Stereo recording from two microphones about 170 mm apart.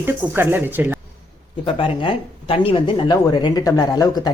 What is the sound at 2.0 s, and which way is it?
Speech, 30° left (ahead or behind).